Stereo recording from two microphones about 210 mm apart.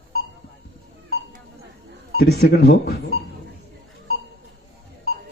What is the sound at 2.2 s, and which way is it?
Speech, 50° left (ahead or behind).